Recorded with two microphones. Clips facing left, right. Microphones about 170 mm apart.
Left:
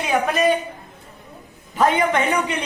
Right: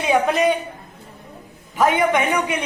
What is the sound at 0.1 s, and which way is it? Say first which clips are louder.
Speech: right 2 dB; 20° right (ahead or behind).